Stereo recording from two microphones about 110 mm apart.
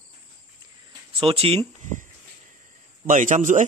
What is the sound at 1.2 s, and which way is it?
Speech, 60° right (ahead or behind).